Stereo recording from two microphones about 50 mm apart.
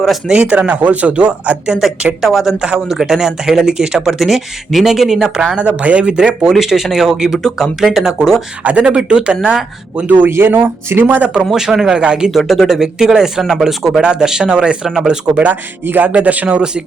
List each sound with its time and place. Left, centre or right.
0.3 s speech: right
2.2 s speech: centre
5.5 s speech: right
6.5 s speech: centre
7.3 s speech: centre
7.8 s speech: centre
8.6 s speech: right
10.1 s speech: right
11.5 s speech: centre
12.3 s speech: centre
12.6 s speech: centre
13.4 s speech: centre
14.0 s speech: centre
15.9 s speech: right